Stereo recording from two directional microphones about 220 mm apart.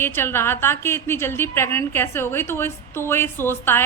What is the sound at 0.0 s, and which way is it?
A woman's voice, 10° left (ahead or behind).